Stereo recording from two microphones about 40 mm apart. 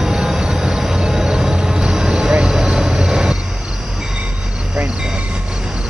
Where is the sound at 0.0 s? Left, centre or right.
Centre.